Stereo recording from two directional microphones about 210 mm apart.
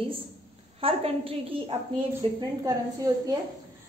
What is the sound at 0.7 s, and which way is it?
A woman's voice, 25° right (ahead or behind).